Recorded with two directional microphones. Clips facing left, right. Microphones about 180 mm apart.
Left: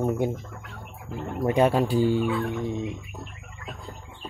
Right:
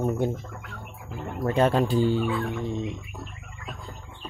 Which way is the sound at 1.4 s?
10° left (ahead or behind).